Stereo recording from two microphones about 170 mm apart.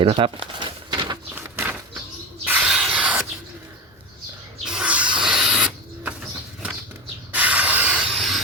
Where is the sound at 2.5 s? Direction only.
5° right (ahead or behind).